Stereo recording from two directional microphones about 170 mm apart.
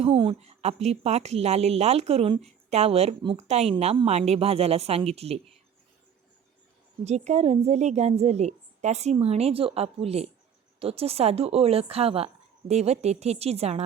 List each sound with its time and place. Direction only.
0.0 s speech: 30° right (ahead or behind)
7.0 s speech: 40° right (ahead or behind)